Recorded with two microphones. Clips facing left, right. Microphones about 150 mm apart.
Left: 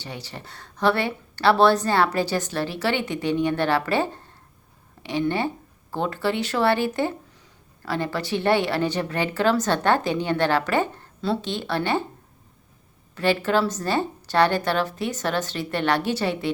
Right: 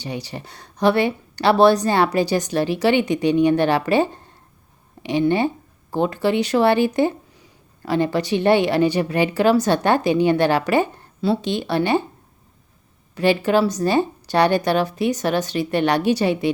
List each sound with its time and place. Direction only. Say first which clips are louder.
0.0 s speech: right 7 dB; 15° right (ahead or behind)
13.1 s speech: right 4 dB; 15° right (ahead or behind)